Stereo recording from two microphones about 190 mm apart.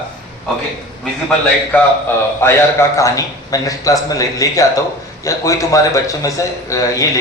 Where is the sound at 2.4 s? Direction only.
15° left (ahead or behind).